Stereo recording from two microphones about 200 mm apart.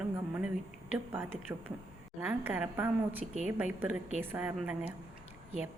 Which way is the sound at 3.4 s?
10° right (ahead or behind).